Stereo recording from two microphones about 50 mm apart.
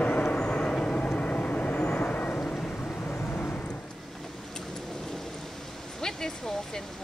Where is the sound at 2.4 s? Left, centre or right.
Centre.